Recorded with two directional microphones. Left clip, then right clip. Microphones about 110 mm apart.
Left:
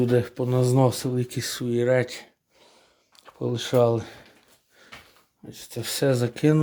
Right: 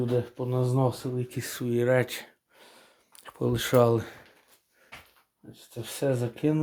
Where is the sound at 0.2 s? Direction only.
90° left; by 1.2 s 70° left (ahead or behind).